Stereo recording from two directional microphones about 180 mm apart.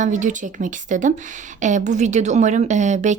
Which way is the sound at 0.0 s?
45° right (ahead or behind).